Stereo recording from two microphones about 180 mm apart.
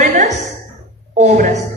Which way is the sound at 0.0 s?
40° right (ahead or behind).